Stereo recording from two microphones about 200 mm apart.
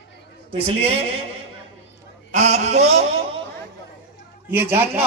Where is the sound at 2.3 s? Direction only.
35° right (ahead or behind).